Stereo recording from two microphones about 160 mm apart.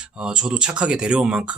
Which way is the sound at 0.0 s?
5° right (ahead or behind).